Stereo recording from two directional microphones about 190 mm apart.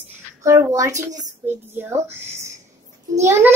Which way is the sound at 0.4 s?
15° right (ahead or behind).